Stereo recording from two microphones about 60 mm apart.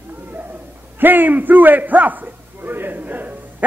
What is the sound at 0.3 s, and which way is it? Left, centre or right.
A man's voice, right.